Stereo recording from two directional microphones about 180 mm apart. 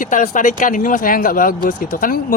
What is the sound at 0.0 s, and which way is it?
Speech, 45° left (ahead or behind).